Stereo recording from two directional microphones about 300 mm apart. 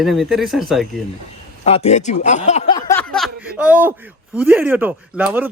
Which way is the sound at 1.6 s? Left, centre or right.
Left.